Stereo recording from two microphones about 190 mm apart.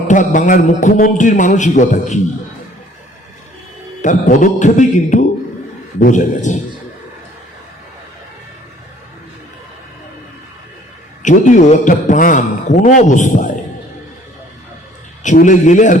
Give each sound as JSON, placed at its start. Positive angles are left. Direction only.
{"t": 0.1, "sound": "a man's voice", "side_deg": 40}
{"t": 4.0, "sound": "a man's voice", "side_deg": 40}
{"t": 11.2, "sound": "a man's voice", "side_deg": 40}
{"t": 15.2, "sound": "a man's voice", "side_deg": 40}